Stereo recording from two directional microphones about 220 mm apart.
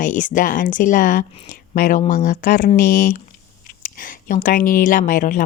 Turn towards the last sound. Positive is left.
turn(degrees=40)  # may be behind; listen again after turning